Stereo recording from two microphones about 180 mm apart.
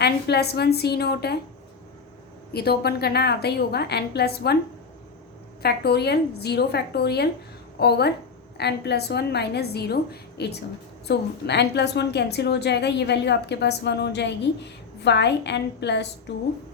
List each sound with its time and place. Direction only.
0.0 s a woman's voice: 65° left (ahead or behind)
2.5 s a woman's voice: 60° left (ahead or behind)
5.6 s a woman's voice: 65° left (ahead or behind)